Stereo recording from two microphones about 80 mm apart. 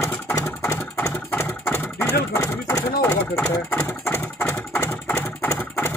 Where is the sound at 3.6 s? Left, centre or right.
Left.